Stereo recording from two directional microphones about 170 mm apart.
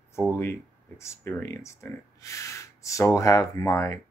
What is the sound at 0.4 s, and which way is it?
Speech, 15° left (ahead or behind).